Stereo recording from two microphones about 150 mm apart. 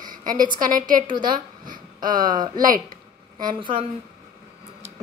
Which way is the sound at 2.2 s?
30° right (ahead or behind).